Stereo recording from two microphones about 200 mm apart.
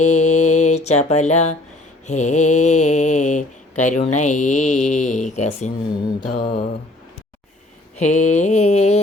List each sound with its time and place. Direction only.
0.0 s music: 35° left (ahead or behind)
2.0 s speech: 35° left (ahead or behind)
6.2 s mantra: 45° left (ahead or behind)
7.9 s speech: 35° left (ahead or behind)